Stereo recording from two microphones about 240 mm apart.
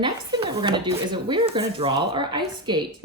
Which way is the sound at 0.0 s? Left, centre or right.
Centre.